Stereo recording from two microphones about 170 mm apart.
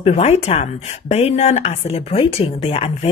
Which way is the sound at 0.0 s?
40° left (ahead or behind).